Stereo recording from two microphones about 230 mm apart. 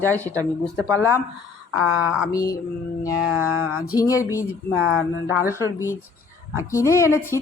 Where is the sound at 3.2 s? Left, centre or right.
Centre.